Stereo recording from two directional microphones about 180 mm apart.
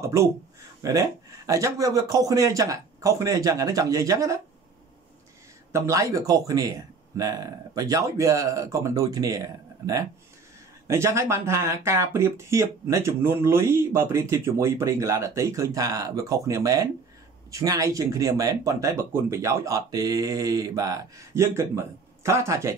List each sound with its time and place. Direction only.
0.0 s speech: 15° right (ahead or behind)
5.7 s speech: 15° right (ahead or behind)
10.9 s speech: 15° right (ahead or behind)